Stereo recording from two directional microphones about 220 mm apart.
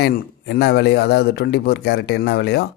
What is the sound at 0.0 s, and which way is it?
Speech, 50° left (ahead or behind).